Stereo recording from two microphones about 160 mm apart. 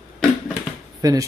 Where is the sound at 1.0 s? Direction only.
25° right (ahead or behind).